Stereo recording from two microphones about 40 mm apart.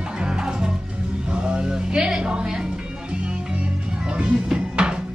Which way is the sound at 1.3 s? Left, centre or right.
Right.